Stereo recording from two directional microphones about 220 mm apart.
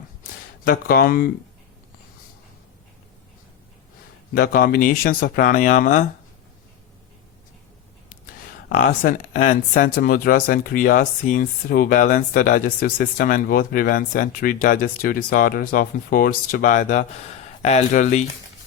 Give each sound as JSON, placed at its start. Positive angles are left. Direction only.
{"t": 0.2, "sound": "a sound", "side_deg": 40}
{"t": 4.4, "sound": "speech", "side_deg": 45}
{"t": 8.3, "sound": "speech", "side_deg": 40}